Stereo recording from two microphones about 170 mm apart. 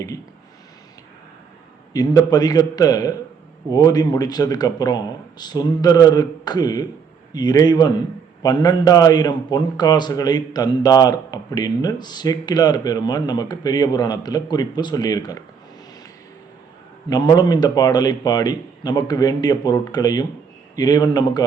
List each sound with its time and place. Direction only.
1.9 s a man's voice: 20° left (ahead or behind)
17.1 s a man's voice: 25° left (ahead or behind)